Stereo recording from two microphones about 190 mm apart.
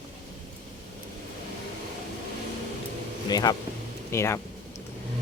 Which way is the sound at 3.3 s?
20° left (ahead or behind).